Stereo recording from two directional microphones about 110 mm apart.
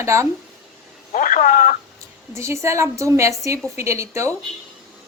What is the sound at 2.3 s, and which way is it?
A woman's voice, 25° right (ahead or behind).